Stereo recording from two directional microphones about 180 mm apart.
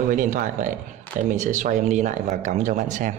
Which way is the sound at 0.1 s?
45° right (ahead or behind).